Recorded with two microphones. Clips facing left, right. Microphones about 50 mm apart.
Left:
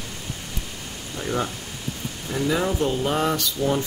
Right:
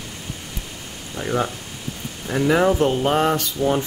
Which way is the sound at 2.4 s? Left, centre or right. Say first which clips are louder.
Right 6 dB; right.